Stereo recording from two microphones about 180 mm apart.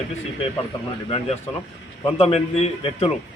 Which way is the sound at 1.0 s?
30° left (ahead or behind).